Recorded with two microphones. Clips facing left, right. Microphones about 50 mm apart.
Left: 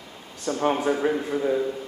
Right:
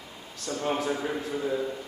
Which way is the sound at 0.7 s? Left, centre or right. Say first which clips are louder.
Left 6 dB; left.